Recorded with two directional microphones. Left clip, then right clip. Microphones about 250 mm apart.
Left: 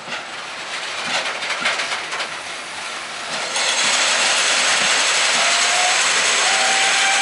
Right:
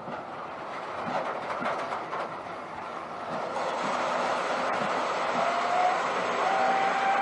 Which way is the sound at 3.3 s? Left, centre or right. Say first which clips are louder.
Left 10 dB; centre.